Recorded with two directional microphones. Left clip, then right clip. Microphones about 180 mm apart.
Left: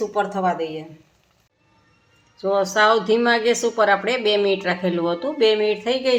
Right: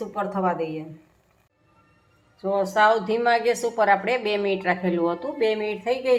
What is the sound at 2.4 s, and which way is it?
Speech, 50° left (ahead or behind).